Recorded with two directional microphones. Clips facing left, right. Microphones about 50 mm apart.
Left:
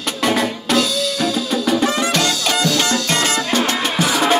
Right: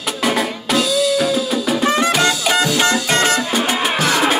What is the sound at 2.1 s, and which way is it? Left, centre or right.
Music, centre.